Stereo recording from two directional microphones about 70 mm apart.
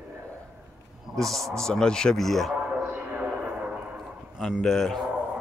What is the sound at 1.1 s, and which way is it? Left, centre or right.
A man's voice, centre.